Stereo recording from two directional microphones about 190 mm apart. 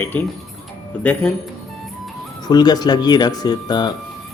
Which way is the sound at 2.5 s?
20° left (ahead or behind).